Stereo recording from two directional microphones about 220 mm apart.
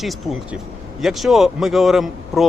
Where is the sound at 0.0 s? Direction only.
Centre (ahead or behind).